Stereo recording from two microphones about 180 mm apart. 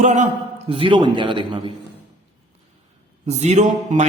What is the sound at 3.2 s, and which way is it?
Speech, 40° right (ahead or behind).